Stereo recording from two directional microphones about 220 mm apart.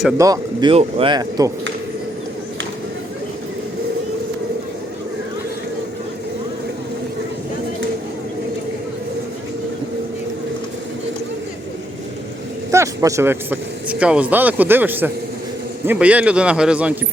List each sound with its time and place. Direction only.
0.2 s speech: 20° right (ahead or behind)
12.7 s speech: 15° right (ahead or behind)